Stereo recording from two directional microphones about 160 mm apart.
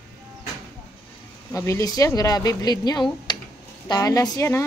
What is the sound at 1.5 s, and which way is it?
Speech, 20° left (ahead or behind).